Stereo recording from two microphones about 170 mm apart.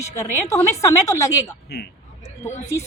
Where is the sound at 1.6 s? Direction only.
75° left (ahead or behind).